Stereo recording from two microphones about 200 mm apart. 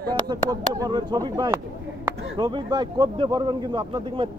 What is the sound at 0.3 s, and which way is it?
Speech, 20° right (ahead or behind).